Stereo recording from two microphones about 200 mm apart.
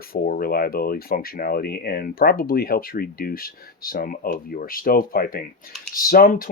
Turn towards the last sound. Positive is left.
turn(degrees=45)  # may be behind; listen again after turning